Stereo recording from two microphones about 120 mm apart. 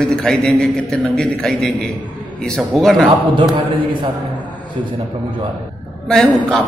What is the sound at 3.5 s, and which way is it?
Speech, 45° right (ahead or behind).